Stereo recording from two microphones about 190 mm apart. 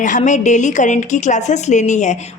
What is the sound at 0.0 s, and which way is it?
A woman's voice, 40° left (ahead or behind).